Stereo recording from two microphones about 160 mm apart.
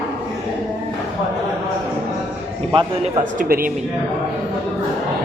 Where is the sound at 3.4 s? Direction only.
60° right (ahead or behind).